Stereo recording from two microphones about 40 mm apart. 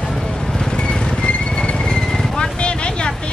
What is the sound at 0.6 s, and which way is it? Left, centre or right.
Vehicle, left.